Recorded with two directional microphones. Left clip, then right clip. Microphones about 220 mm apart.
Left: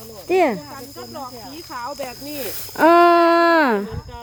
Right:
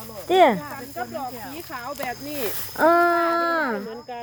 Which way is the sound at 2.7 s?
45° left (ahead or behind).